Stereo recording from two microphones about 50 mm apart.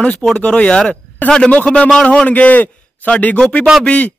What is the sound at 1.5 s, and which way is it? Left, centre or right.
Speech, left.